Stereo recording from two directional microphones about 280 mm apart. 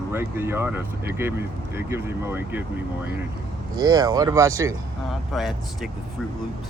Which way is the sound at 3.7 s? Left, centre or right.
Centre.